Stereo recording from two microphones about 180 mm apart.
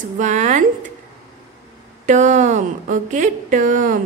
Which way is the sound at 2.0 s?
40° right (ahead or behind).